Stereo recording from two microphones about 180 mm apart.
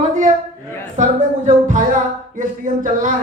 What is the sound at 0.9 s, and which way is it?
Speech, 45° right (ahead or behind).